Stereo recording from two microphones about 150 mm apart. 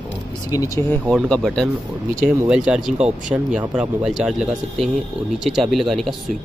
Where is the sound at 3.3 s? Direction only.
15° right (ahead or behind).